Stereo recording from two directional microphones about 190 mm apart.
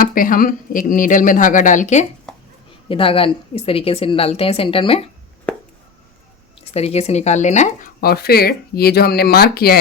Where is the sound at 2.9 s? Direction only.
30° left (ahead or behind).